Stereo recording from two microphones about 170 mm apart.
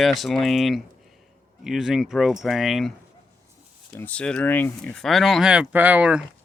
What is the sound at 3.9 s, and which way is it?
Speech, 10° left (ahead or behind).